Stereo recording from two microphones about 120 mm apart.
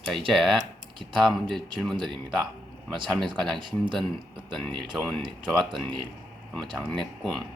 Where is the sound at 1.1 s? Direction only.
Centre (ahead or behind).